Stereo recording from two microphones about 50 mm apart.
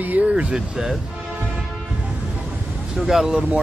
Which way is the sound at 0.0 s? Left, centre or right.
Right.